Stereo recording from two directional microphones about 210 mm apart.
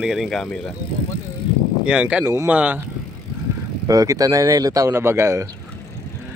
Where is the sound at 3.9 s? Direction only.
15° right (ahead or behind).